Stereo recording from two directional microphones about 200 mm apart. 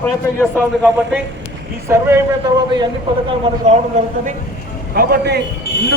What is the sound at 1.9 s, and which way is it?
Speech, 15° right (ahead or behind).